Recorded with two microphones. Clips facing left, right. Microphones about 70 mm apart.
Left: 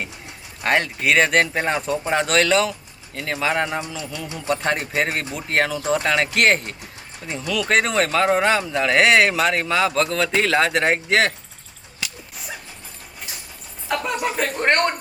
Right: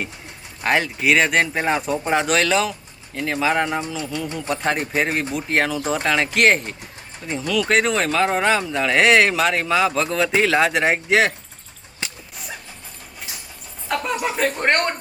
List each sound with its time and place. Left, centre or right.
0.6 s speech: centre
12.0 s a sound: right
13.8 s speech: centre